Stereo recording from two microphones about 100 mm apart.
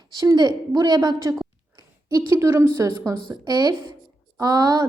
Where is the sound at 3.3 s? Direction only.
40° right (ahead or behind).